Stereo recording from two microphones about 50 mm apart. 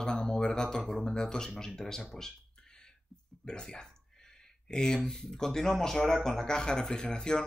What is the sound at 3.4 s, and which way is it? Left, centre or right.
Speech, centre.